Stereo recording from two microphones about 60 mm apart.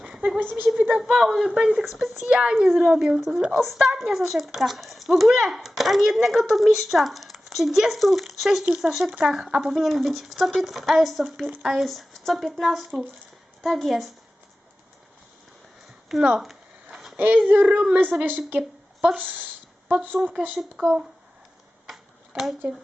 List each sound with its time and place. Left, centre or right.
0.0 s a sound: centre
0.8 s child singing: right
1.1 s a woman's voice: centre
2.2 s a woman's voice: centre
3.2 s speech: centre
8.6 s a woman's voice: centre
9.7 s speech: centre
16.4 s a sound: centre
17.2 s child singing: right
20.2 s speech: right
20.7 s a woman's voice: centre